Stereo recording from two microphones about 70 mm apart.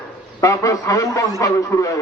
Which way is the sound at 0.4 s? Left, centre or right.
Left.